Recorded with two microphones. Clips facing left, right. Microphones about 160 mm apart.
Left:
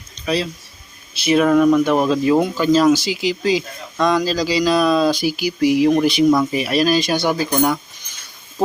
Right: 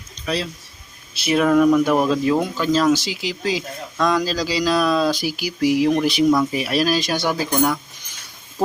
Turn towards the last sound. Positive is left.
turn(degrees=5)  # may be behind; listen again after turning